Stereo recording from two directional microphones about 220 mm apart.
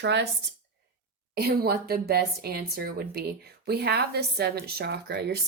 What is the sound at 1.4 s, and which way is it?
Speech, 45° right (ahead or behind).